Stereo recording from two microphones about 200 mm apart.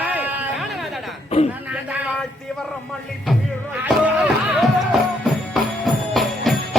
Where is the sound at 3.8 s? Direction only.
5° right (ahead or behind).